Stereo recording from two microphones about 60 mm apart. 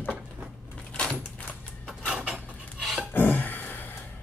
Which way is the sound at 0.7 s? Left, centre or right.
Centre.